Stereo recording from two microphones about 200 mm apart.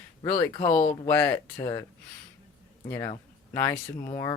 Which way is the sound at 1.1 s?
10° left (ahead or behind).